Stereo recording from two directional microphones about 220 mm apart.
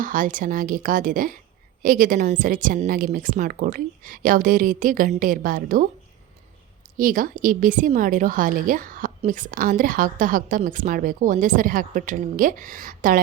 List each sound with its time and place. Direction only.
0.0 s a woman's voice: 35° right (ahead or behind)
6.9 s a woman's voice: 40° right (ahead or behind)